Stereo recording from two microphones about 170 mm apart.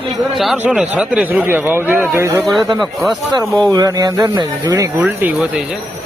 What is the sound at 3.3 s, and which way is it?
Speech, 20° right (ahead or behind).